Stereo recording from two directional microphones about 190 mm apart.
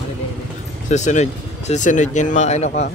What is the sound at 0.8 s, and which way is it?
Speech, 40° left (ahead or behind).